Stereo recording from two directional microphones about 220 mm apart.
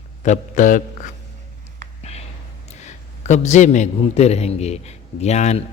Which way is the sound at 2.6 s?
30° left (ahead or behind).